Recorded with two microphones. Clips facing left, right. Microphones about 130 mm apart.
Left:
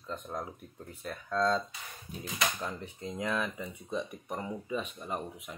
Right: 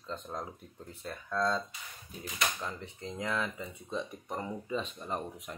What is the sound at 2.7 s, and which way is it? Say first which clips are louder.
Speech: left 2 dB; 20° left (ahead or behind).